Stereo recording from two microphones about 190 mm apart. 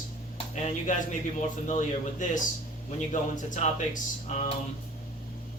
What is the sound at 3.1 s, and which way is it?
Speech, 40° left (ahead or behind).